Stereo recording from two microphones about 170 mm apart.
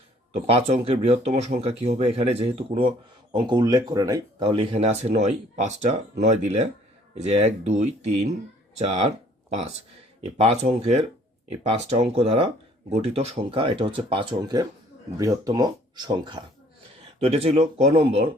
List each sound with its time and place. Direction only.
0.4 s speech: 35° right (ahead or behind)
10.4 s speech: 40° right (ahead or behind)